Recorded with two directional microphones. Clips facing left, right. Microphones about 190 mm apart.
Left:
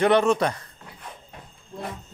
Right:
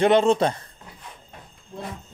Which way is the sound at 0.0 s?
30° right (ahead or behind).